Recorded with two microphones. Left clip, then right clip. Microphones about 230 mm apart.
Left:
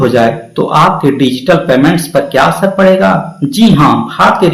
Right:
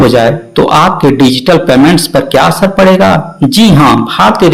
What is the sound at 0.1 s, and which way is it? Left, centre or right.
Speech, right.